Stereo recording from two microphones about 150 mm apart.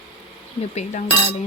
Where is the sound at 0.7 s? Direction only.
50° left (ahead or behind).